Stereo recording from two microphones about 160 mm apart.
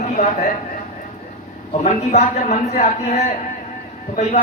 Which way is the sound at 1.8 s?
45° left (ahead or behind).